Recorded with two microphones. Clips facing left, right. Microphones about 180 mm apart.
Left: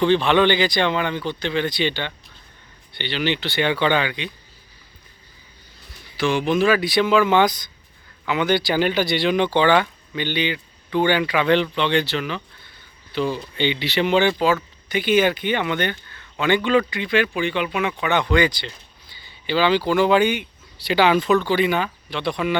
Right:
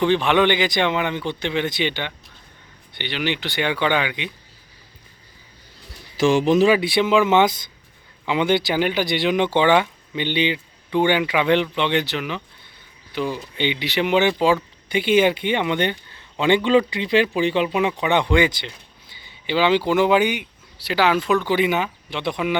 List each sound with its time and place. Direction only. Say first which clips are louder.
0.0 s speech: left 1 dB; 15° right (ahead or behind)
6.3 s speech: right 3 dB; 40° right (ahead or behind)
6.7 s speech: right 1 dB; 20° right (ahead or behind)
20.8 s speech: left 2 dB; 5° right (ahead or behind)
21.4 s speech: even; 15° right (ahead or behind)